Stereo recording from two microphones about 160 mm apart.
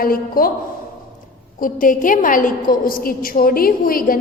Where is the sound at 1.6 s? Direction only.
60° left (ahead or behind).